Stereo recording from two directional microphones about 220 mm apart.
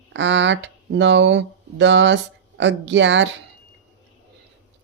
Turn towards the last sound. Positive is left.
turn(degrees=-55)  # may be behind; listen again after turning